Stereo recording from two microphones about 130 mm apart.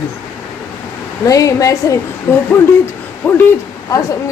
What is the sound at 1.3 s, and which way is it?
A woman's voice, 25° left (ahead or behind).